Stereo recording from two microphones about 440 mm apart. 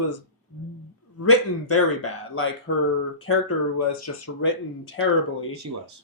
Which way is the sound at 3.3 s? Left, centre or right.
Left.